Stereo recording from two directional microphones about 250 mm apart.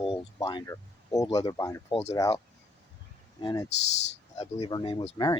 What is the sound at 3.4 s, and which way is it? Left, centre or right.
Speech, centre.